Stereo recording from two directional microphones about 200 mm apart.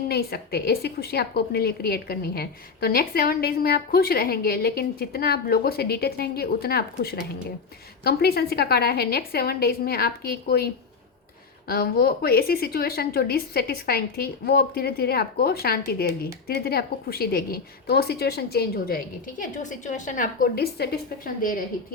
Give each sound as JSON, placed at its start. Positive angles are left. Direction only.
{"t": 0.1, "sound": "a woman's voice", "side_deg": 50}
{"t": 11.7, "sound": "a woman's voice", "side_deg": 50}